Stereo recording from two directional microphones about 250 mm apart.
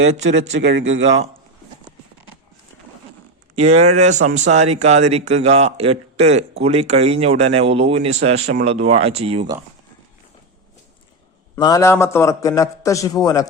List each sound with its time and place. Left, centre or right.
0.2 s speech: right
0.7 s speech: right
3.5 s speech: right
11.5 s a man's voice: centre